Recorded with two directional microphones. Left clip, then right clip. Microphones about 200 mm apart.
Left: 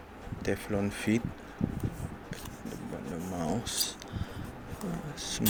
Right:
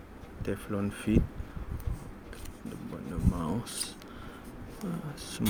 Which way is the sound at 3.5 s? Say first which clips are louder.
Left 4 dB; 25° right (ahead or behind).